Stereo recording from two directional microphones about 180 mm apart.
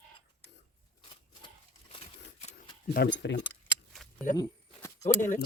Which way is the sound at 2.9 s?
65° left (ahead or behind).